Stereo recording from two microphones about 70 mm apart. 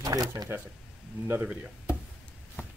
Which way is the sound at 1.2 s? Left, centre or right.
Right.